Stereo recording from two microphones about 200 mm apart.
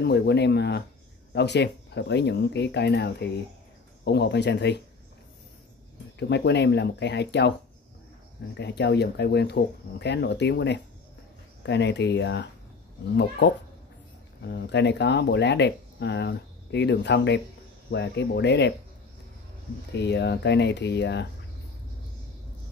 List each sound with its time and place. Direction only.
0.0 s speech: 55° left (ahead or behind)
6.1 s speech: 55° left (ahead or behind)
8.5 s speech: 55° left (ahead or behind)
19.9 s speech: 60° left (ahead or behind)